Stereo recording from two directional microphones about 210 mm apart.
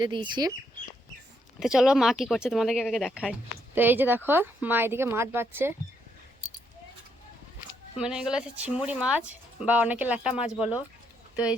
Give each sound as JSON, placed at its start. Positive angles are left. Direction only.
{"t": 0.0, "sound": "speech", "side_deg": -20}
{"t": 1.5, "sound": "speech", "side_deg": 0}
{"t": 8.0, "sound": "speech", "side_deg": -5}